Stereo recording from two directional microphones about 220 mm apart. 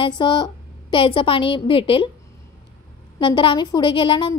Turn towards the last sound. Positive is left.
turn(degrees=20)  # may be behind; listen again after turning